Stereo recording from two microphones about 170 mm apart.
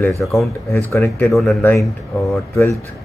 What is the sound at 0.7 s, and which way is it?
Speech, 15° left (ahead or behind).